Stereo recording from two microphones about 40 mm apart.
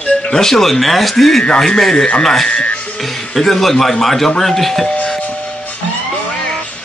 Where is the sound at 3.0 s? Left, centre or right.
Centre.